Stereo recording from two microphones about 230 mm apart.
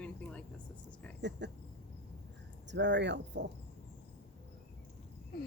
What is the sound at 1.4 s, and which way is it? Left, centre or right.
Cricket, right.